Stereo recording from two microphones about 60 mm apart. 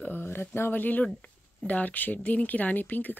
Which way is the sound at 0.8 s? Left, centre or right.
Left.